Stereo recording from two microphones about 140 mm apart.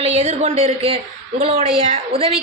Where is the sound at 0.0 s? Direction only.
50° right (ahead or behind).